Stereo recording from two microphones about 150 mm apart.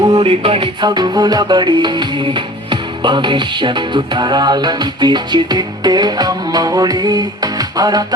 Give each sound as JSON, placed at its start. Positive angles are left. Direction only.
{"t": 0.0, "sound": "music", "side_deg": -25}
{"t": 0.3, "sound": "music", "side_deg": -40}